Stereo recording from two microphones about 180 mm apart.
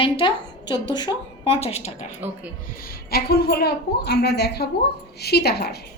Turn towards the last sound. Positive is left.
turn(degrees=60)  # may be behind; listen again after turning